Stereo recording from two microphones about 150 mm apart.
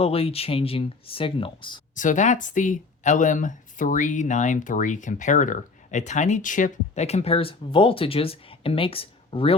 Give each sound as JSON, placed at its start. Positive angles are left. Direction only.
{"t": 0.0, "sound": "speech", "side_deg": 40}
{"t": 2.0, "sound": "speech", "side_deg": 55}